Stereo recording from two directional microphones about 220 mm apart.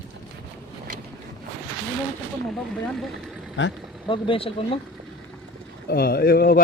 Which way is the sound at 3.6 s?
55° left (ahead or behind).